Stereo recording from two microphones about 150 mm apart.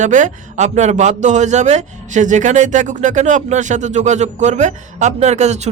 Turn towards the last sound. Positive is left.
turn(degrees=-50)  # may be behind; listen again after turning